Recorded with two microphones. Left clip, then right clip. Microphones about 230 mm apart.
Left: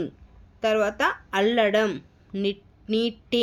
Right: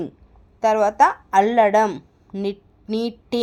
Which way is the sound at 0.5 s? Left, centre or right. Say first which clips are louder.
Right 7 dB; centre.